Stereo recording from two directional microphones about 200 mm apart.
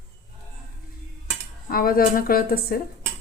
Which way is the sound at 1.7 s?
45° left (ahead or behind).